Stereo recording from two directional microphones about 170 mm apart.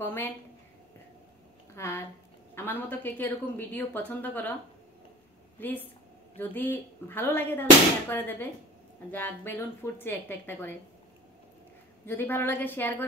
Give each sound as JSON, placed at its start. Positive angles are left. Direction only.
{"t": 0.0, "sound": "a woman's voice", "side_deg": 15}
{"t": 1.8, "sound": "a sound", "side_deg": 15}
{"t": 2.5, "sound": "speech", "side_deg": 10}
{"t": 5.6, "sound": "speech", "side_deg": 10}
{"t": 12.1, "sound": "speech", "side_deg": 10}